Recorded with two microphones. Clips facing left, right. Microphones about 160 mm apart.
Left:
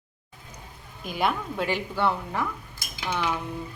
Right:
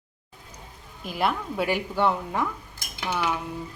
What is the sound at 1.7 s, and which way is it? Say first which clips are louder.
Speech: right 2 dB; 15° right (ahead or behind).